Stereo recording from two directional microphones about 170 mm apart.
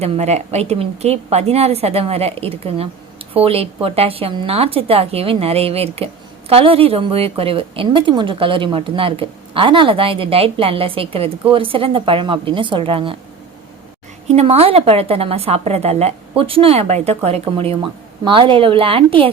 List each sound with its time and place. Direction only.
0.0 s a woman's voice: 40° right (ahead or behind)
14.3 s a woman's voice: 35° right (ahead or behind)